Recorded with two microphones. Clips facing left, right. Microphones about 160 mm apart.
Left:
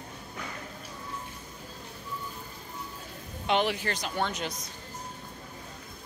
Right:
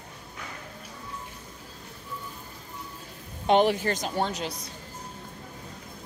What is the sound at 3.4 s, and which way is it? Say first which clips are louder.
Speech: right 6 dB; 45° right (ahead or behind).